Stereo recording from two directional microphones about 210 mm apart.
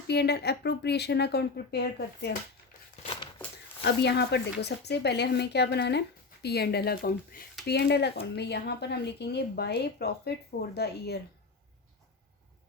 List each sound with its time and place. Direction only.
0.1 s a woman's voice: 50° left (ahead or behind)
3.0 s a sound: 25° left (ahead or behind)
3.8 s a woman's voice: 50° left (ahead or behind)